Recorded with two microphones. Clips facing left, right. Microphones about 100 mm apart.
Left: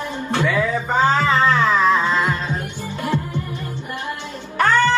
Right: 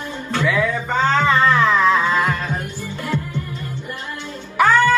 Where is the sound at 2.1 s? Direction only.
25° left (ahead or behind).